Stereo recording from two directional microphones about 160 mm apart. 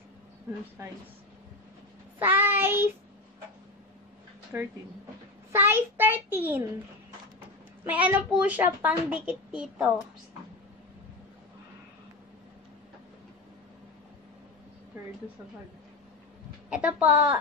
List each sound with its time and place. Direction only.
0.8 s a child's voice: 20° right (ahead or behind)
2.1 s child singing: 10° right (ahead or behind)
4.5 s a child's voice: 15° right (ahead or behind)
16.6 s a child's voice: 5° right (ahead or behind)